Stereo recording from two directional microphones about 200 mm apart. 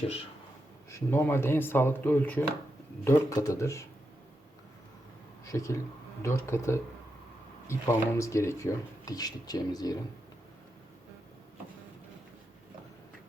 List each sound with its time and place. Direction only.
0.9 s speech: 15° left (ahead or behind)
5.5 s speech: 15° left (ahead or behind)